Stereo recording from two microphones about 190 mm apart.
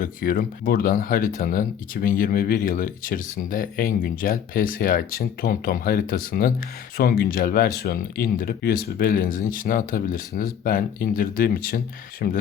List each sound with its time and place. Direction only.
0.0 s speech: 50° left (ahead or behind)